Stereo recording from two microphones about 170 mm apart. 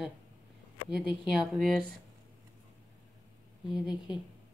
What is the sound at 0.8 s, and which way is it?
Speech, 5° right (ahead or behind).